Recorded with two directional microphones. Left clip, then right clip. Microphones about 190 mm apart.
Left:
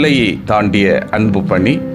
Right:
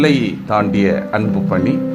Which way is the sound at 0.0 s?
20° left (ahead or behind).